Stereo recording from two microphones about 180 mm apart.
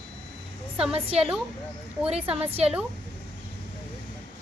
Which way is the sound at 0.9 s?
35° right (ahead or behind).